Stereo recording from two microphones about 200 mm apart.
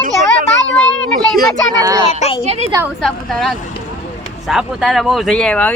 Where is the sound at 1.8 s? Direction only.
15° right (ahead or behind).